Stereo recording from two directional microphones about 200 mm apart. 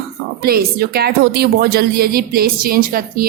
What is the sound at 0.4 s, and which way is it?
A woman's voice, 50° right (ahead or behind).